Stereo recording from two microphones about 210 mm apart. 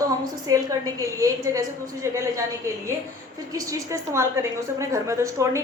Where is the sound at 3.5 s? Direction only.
15° right (ahead or behind).